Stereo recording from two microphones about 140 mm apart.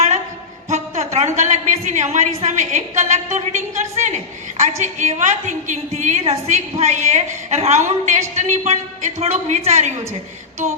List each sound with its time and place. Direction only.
0.7 s a woman's voice: 55° right (ahead or behind)